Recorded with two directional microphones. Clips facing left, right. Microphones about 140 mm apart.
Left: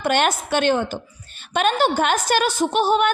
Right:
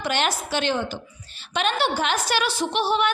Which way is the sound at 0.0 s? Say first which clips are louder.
Left 5 dB; 50° left (ahead or behind).